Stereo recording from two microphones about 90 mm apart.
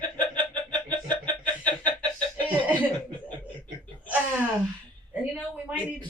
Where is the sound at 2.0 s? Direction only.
15° left (ahead or behind).